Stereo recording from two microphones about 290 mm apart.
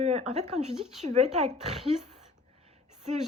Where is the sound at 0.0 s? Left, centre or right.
Right.